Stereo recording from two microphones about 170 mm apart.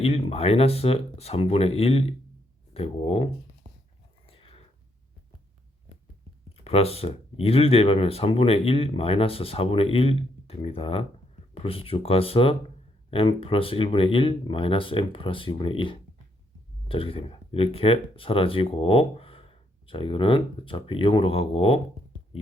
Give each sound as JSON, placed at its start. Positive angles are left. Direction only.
{"t": 0.0, "sound": "speech", "side_deg": 35}
{"t": 4.3, "sound": "a sound", "side_deg": 35}
{"t": 6.7, "sound": "speech", "side_deg": 35}